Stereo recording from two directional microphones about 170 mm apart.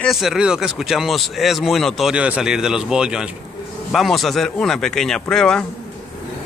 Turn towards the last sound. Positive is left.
turn(degrees=5)  # may be behind; listen again after turning